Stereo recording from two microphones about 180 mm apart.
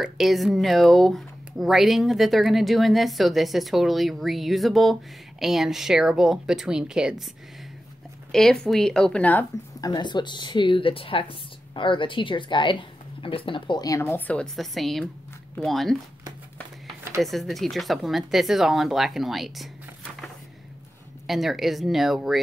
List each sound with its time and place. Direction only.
0.0 s speech: centre (ahead or behind)
8.3 s speech: centre (ahead or behind)
9.8 s speech: 25° left (ahead or behind); by 16.0 s centre (ahead or behind)
17.2 s speech: centre (ahead or behind)
21.3 s speech: centre (ahead or behind)